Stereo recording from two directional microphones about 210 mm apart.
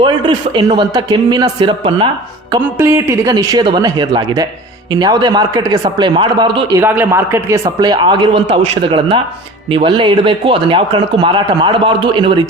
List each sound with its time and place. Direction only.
0.0 s speech: 20° right (ahead or behind)
2.6 s a man's voice: 10° right (ahead or behind)